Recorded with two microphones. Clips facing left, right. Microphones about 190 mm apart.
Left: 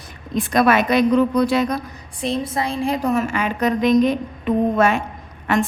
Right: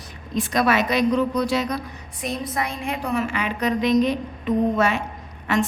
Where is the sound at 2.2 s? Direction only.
30° left (ahead or behind).